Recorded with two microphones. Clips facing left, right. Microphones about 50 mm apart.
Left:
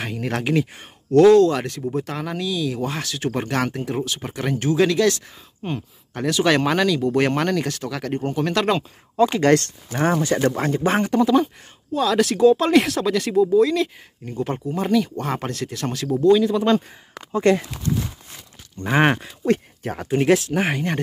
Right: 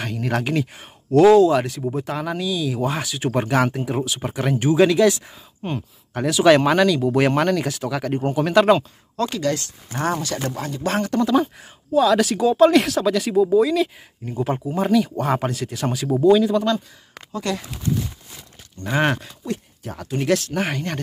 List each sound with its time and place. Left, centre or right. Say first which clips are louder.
0.0 s speech: right 1 dB; centre
9.2 s speech: left 6 dB; centre
9.9 s speech: left 4 dB; left
11.1 s speech: left 2 dB; centre
11.3 s speech: left 1 dB; centre
17.3 s speech: left 8 dB; left
18.8 s speech: left 2 dB; left
19.4 s speech: left 8 dB; left
20.1 s speech: left 3 dB; left
20.3 s speech: left 2 dB; centre